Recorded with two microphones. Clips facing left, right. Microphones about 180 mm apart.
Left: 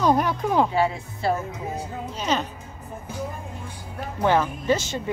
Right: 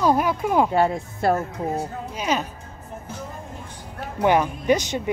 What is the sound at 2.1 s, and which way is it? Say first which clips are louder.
Speech: right 1 dB; 10° right (ahead or behind).